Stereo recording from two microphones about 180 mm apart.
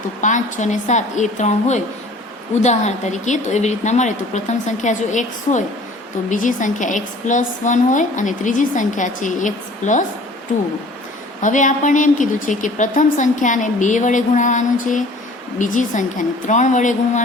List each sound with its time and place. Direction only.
0.2 s a woman's voice: 45° left (ahead or behind)
11.4 s speech: 45° left (ahead or behind)